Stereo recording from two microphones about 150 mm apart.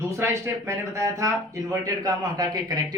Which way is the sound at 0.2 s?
20° right (ahead or behind).